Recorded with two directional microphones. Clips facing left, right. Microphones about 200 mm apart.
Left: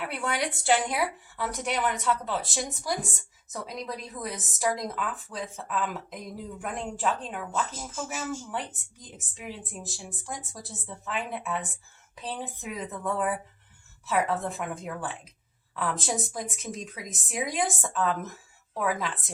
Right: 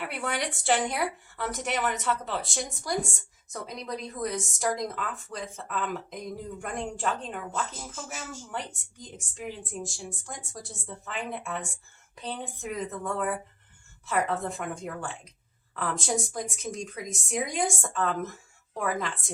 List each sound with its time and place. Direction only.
0.0 s a woman's voice: centre (ahead or behind)